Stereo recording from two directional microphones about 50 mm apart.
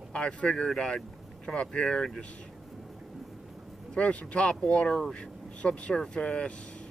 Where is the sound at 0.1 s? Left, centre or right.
Centre.